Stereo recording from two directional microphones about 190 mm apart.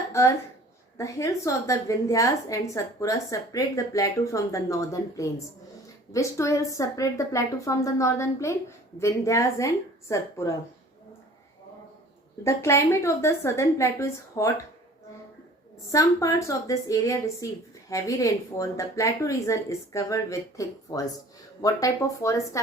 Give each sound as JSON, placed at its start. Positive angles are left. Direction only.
{"t": 0.1, "sound": "a woman's voice", "side_deg": 15}
{"t": 12.4, "sound": "a woman's voice", "side_deg": 15}
{"t": 15.9, "sound": "a woman's voice", "side_deg": 15}